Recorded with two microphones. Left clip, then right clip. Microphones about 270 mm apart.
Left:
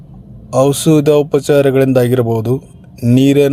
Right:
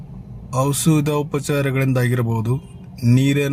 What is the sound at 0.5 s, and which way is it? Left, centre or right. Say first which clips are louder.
Speech: left 9 dB; left.